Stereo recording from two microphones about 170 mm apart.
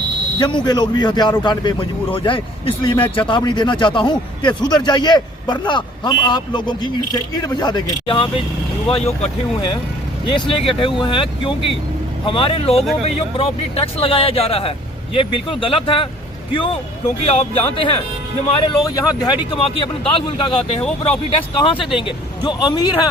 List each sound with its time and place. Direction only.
0.3 s a man's voice: 25° left (ahead or behind)
18.9 s a man's voice: 20° left (ahead or behind)